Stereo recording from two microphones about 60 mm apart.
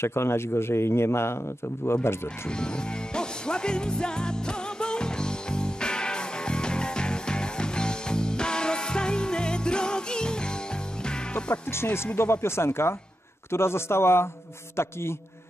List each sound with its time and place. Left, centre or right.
0.0 s a man's voice: left
2.6 s music: centre
11.7 s a man's voice: left